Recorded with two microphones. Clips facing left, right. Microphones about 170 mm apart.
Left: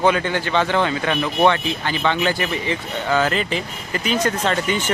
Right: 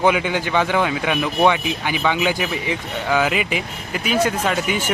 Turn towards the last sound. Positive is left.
turn(degrees=-10)  # may be behind; listen again after turning